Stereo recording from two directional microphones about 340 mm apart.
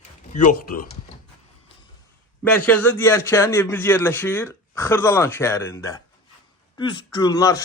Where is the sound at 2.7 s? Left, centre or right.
Centre.